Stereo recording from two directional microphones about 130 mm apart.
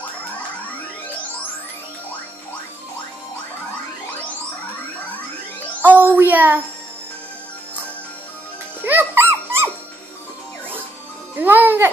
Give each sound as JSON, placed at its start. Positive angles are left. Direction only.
{"t": 5.8, "sound": "child singing", "side_deg": -15}
{"t": 8.8, "sound": "dog", "side_deg": -15}
{"t": 11.3, "sound": "music", "side_deg": -15}